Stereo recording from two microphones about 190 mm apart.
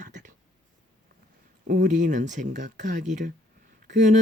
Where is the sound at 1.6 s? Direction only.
45° right (ahead or behind).